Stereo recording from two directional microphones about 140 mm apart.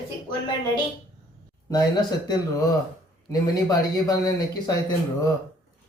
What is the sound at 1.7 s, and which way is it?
A man's voice, 30° left (ahead or behind).